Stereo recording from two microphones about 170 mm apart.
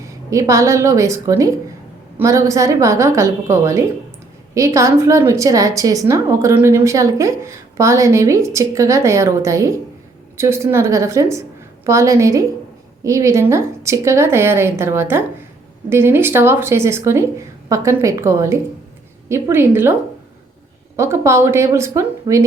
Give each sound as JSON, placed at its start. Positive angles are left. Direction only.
{"t": 0.0, "sound": "a woman's voice", "side_deg": -20}